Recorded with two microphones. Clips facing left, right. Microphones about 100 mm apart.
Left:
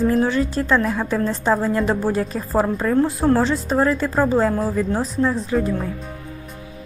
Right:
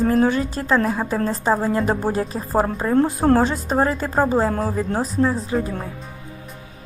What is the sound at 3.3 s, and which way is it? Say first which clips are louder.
Speech: even; 45° right (ahead or behind).